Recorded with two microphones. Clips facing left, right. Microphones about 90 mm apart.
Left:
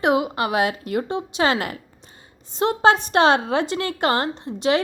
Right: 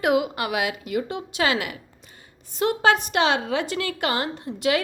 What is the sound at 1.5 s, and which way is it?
A woman's voice, 40° left (ahead or behind).